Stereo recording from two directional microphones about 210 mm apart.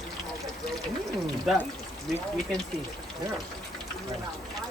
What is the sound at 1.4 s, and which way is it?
Speech, centre (ahead or behind).